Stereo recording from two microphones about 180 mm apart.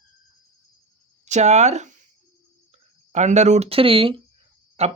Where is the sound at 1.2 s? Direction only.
40° right (ahead or behind).